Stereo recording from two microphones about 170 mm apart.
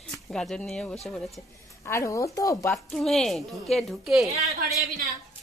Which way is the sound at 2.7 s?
Centre (ahead or behind).